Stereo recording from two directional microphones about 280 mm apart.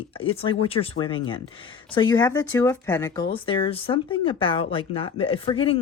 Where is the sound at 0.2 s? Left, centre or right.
Centre.